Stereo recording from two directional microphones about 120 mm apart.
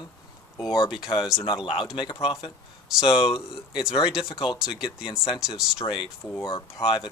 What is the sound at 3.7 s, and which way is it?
Speech, 5° right (ahead or behind).